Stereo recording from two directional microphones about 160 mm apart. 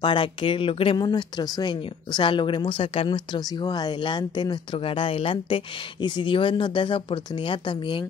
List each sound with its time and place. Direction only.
0.0 s speech: 30° left (ahead or behind)